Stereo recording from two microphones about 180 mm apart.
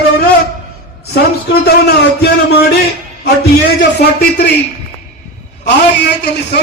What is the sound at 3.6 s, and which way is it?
Speech, 65° left (ahead or behind).